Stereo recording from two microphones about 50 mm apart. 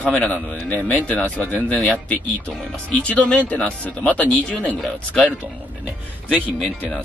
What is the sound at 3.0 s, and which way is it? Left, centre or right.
Speech, left.